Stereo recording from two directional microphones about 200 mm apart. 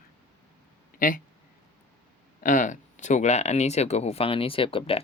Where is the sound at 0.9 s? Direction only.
45° left (ahead or behind).